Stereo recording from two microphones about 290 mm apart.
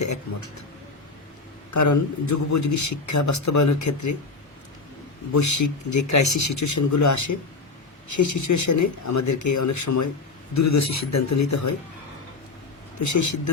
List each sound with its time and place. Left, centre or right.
1.7 s a man's voice: left
5.3 s a man's voice: left
13.0 s a man's voice: left